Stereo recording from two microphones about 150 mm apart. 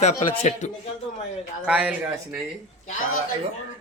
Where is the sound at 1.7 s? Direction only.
10° right (ahead or behind).